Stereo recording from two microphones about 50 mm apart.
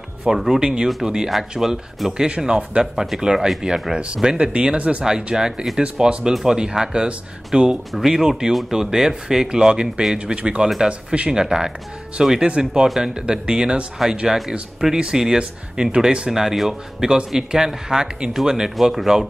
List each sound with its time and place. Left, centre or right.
0.2 s speech: centre
3.9 s speech: right
5.0 s speech: centre
12.8 s speech: centre
13.1 s speech: centre
16.3 s speech: centre